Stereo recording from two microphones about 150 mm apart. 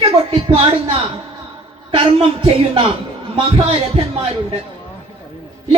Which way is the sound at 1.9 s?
40° right (ahead or behind).